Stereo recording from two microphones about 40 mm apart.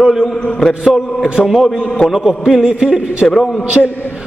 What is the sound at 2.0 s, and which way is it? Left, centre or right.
Mantra, centre.